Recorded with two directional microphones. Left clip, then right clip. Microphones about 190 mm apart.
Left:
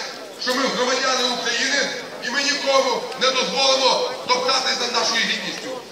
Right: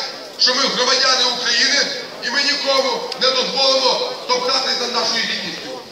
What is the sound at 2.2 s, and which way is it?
Speech, 15° left (ahead or behind).